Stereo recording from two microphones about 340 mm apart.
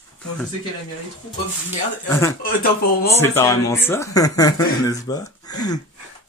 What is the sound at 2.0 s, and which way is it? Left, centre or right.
Speech, centre.